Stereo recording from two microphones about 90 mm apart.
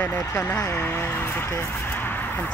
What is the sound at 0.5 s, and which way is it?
Speech, 30° left (ahead or behind).